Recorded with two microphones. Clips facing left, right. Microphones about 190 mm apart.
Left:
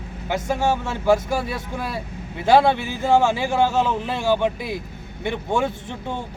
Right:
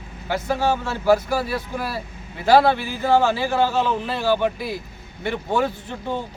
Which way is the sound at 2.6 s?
20° left (ahead or behind).